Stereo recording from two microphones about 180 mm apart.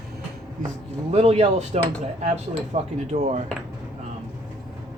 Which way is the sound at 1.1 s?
35° right (ahead or behind).